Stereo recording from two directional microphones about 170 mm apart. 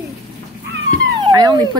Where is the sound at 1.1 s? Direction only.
25° right (ahead or behind).